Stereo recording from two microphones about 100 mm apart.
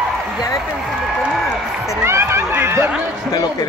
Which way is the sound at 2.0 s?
25° right (ahead or behind).